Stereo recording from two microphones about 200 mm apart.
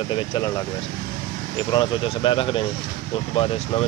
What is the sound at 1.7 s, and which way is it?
Speech, 25° left (ahead or behind).